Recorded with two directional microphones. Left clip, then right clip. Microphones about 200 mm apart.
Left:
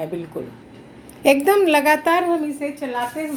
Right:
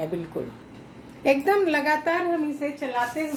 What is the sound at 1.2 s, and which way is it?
Speech, 35° left (ahead or behind).